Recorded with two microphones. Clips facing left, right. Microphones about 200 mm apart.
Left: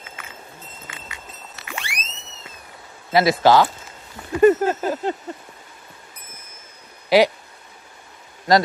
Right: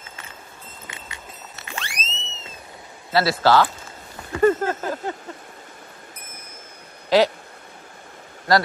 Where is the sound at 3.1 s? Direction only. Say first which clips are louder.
Left 3 dB; 15° left (ahead or behind).